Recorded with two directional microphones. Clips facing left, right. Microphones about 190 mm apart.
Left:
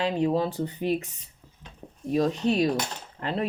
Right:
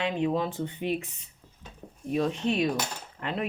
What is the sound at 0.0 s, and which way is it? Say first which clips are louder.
Speech: left 3 dB; 35° left (ahead or behind).